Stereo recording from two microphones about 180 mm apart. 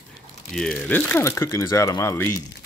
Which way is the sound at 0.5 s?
5° left (ahead or behind).